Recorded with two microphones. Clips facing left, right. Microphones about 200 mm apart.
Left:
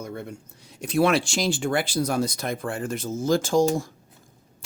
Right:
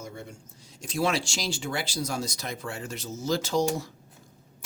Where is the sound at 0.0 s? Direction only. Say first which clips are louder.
Left 6 dB; 60° left (ahead or behind).